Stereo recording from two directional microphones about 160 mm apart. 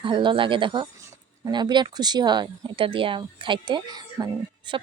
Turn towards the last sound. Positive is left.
turn(degrees=-30)  # may be behind; listen again after turning